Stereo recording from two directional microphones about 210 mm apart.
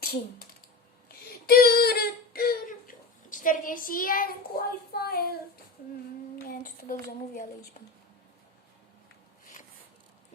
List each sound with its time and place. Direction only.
0.0 s speech: 45° left (ahead or behind)
1.0 s a sound: 45° left (ahead or behind)
6.5 s child singing: 40° left (ahead or behind)